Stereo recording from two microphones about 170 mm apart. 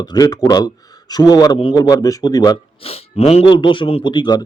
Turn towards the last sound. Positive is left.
turn(degrees=25)  # may be behind; listen again after turning